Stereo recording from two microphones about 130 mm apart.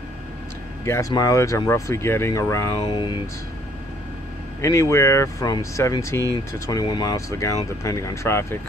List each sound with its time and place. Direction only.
0.8 s speech: 20° left (ahead or behind)
2.8 s speech: 40° left (ahead or behind)
4.6 s speech: 25° left (ahead or behind)